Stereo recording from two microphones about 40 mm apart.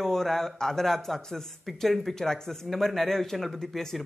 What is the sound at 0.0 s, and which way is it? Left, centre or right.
A man's voice, centre.